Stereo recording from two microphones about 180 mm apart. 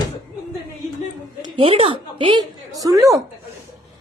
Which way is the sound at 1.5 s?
35° right (ahead or behind).